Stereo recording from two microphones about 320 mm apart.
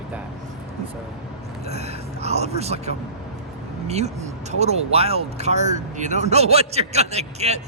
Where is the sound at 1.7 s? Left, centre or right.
Centre.